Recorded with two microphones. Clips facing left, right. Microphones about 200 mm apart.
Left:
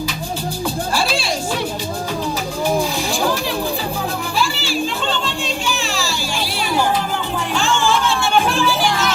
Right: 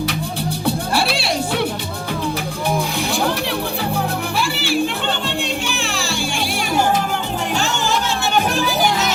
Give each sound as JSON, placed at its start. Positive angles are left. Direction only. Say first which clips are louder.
{"t": 0.6, "sound": "music", "louder": "right 2 dB", "side_deg": -65}
{"t": 4.4, "sound": "music", "louder": "right 2 dB", "side_deg": -60}
{"t": 7.5, "sound": "music", "louder": "left 4 dB", "side_deg": -40}